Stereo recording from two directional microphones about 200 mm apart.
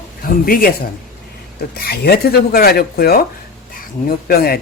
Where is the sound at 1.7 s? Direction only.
50° left (ahead or behind).